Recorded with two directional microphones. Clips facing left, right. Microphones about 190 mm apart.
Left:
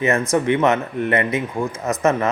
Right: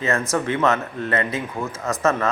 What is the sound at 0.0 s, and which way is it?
Speech, 20° left (ahead or behind).